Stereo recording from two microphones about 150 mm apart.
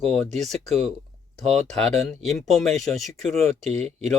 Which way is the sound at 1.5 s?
45° right (ahead or behind).